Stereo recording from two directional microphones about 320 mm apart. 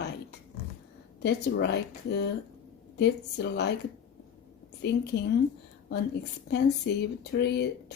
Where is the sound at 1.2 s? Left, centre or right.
Left.